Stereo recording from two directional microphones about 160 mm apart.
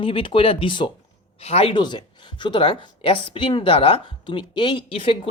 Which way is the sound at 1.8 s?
30° left (ahead or behind).